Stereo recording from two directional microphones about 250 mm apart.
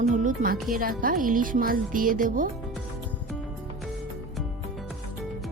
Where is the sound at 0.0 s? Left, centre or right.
Right.